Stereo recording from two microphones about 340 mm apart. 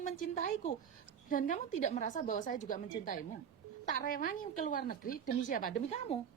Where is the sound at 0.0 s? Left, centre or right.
Left.